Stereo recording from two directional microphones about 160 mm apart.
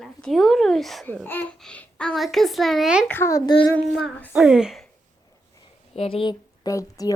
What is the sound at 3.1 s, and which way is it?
Speech, 15° left (ahead or behind).